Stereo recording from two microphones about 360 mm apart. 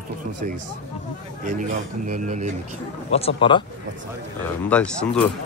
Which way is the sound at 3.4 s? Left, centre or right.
Centre.